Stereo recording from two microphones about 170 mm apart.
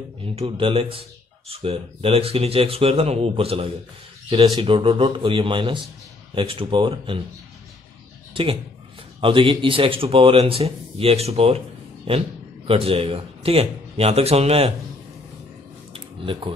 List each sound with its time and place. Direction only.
0.2 s speech: 30° right (ahead or behind)
8.3 s speech: 30° right (ahead or behind)
15.9 s a sound: 30° right (ahead or behind)